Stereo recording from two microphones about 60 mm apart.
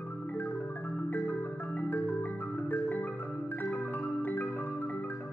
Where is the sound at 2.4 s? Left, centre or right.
Left.